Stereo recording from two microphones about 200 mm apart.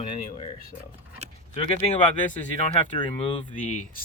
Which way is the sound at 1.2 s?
30° right (ahead or behind).